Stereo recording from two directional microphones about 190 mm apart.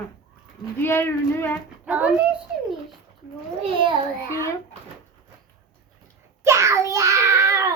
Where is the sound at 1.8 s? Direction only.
5° right (ahead or behind).